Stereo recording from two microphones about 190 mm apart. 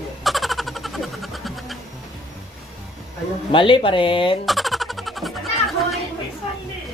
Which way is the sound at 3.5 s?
25° left (ahead or behind).